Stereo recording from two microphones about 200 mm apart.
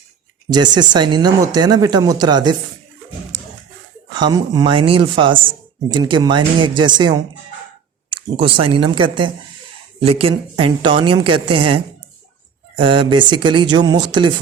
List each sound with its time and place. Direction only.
0.5 s speech: 20° right (ahead or behind)
4.1 s speech: 20° right (ahead or behind)